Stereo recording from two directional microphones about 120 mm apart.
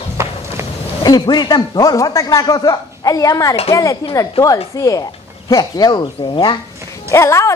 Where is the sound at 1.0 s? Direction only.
35° left (ahead or behind).